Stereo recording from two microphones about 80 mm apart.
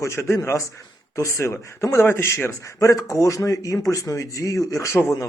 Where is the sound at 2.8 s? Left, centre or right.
Left.